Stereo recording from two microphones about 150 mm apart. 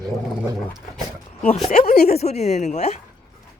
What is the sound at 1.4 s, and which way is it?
A woman's voice, 45° left (ahead or behind).